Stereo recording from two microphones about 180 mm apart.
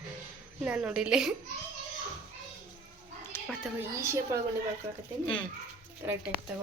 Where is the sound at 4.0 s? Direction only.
15° right (ahead or behind).